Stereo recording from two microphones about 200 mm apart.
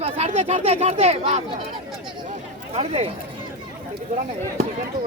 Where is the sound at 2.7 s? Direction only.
30° right (ahead or behind).